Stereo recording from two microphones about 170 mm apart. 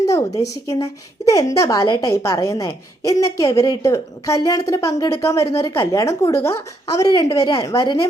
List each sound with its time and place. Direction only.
0.1 s a woman's voice: 20° left (ahead or behind)